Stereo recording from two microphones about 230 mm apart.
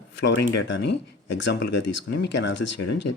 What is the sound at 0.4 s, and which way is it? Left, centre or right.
Speech, left.